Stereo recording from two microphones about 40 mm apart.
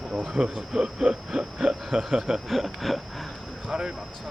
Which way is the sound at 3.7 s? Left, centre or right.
Centre.